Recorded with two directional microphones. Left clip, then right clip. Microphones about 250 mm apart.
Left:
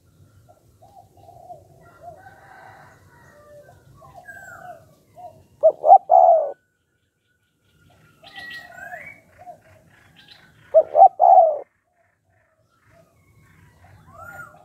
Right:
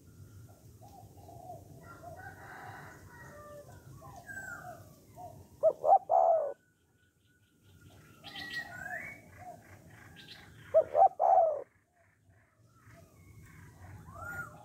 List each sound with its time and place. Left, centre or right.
5.6 s bird: left
10.8 s bird: left